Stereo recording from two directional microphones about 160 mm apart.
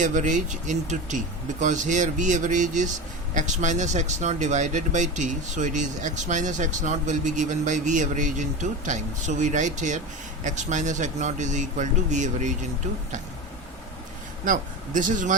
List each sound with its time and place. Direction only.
0.0 s speech: 50° right (ahead or behind)
14.4 s speech: 55° right (ahead or behind)